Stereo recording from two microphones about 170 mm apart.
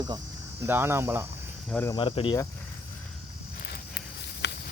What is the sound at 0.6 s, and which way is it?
Speech, 15° right (ahead or behind).